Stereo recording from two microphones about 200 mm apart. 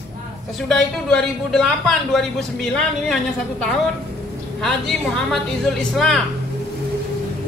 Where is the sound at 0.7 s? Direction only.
5° left (ahead or behind).